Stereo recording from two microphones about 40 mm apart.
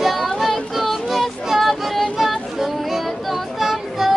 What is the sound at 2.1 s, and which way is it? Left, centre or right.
Child singing, centre.